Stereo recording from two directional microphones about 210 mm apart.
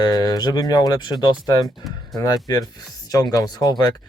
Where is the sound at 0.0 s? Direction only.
20° left (ahead or behind).